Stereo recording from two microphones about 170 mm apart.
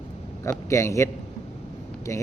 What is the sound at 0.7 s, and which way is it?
A man's voice, 15° left (ahead or behind).